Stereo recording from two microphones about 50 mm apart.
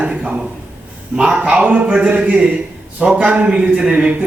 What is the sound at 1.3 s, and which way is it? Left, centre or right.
A man's voice, right.